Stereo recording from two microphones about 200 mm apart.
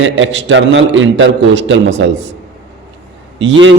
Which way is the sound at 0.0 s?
65° right (ahead or behind).